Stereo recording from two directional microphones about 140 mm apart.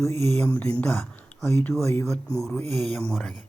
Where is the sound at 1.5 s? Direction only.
20° left (ahead or behind).